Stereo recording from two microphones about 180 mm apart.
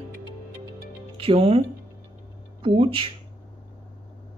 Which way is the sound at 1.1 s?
30° right (ahead or behind).